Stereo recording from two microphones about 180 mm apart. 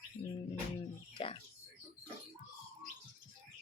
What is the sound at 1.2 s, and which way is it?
Music, 30° left (ahead or behind).